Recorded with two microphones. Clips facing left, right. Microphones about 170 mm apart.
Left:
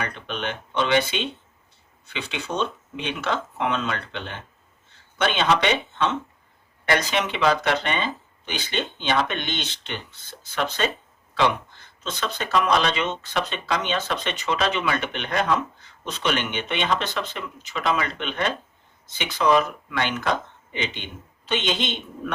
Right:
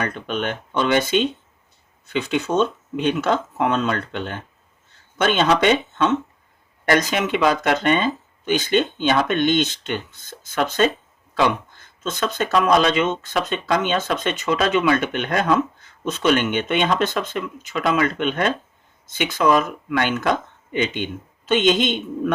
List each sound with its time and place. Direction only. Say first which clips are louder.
0.0 s speech: right 5 dB; 45° right (ahead or behind)